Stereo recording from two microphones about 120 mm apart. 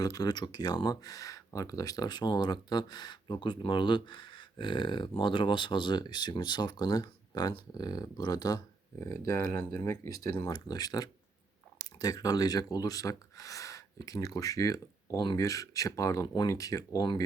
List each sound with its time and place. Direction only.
0.0 s speech: 30° left (ahead or behind)
10.5 s speech: 35° left (ahead or behind)